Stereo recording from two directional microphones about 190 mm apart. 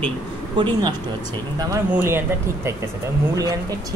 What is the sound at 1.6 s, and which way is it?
Speech, 15° right (ahead or behind).